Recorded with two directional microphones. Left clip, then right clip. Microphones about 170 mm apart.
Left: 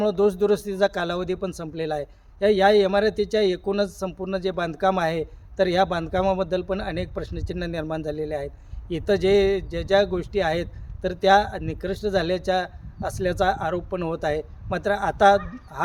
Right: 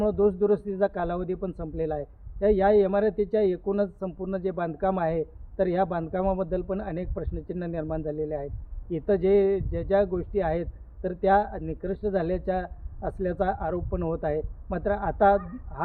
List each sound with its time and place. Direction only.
0.0 s a man's voice: 15° left (ahead or behind)